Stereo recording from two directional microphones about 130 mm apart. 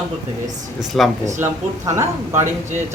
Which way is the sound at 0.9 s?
Centre (ahead or behind).